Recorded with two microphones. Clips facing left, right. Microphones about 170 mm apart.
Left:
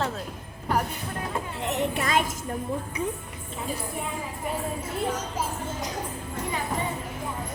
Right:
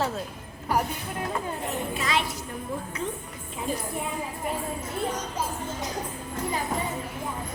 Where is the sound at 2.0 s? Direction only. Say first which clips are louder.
Even; 45° left (ahead or behind).